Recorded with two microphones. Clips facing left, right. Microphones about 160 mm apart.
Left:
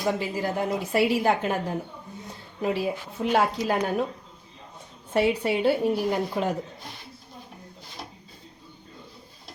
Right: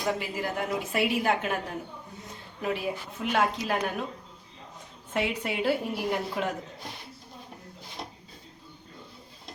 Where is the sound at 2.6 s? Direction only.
30° left (ahead or behind).